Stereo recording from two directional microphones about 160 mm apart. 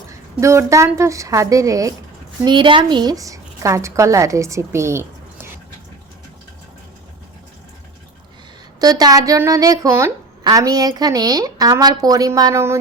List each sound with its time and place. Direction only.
0.3 s a woman's voice: 20° right (ahead or behind)
8.8 s a woman's voice: 25° right (ahead or behind)